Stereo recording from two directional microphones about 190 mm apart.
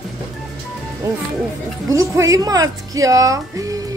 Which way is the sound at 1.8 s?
15° right (ahead or behind).